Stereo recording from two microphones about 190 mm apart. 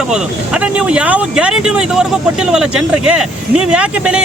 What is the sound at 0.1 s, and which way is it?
Speech, 5° right (ahead or behind).